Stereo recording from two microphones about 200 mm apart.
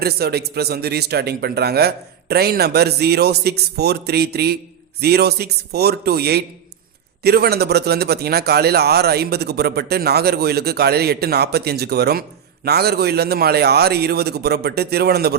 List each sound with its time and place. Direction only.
0.0 s a man's voice: 50° right (ahead or behind)